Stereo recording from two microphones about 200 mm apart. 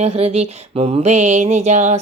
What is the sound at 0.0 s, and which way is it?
Mantra, 30° right (ahead or behind).